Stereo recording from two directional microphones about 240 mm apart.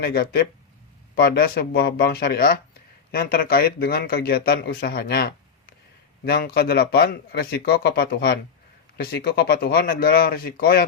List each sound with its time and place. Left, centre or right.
0.0 s a man's voice: left